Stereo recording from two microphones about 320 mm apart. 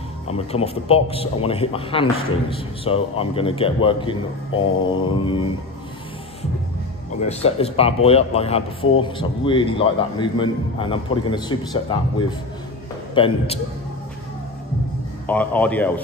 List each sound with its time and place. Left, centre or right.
0.3 s a man's voice: centre
7.2 s a man's voice: centre
15.2 s speech: centre